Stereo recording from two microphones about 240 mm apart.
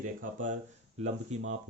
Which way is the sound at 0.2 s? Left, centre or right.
Right.